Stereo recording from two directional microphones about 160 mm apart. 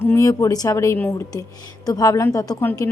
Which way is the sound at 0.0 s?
15° left (ahead or behind).